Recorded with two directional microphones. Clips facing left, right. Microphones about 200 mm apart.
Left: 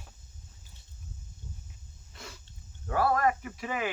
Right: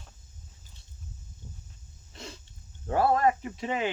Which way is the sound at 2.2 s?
25° right (ahead or behind).